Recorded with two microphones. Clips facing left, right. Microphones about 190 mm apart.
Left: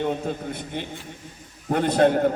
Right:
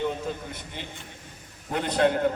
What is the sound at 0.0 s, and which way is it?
A man's voice, 55° left (ahead or behind).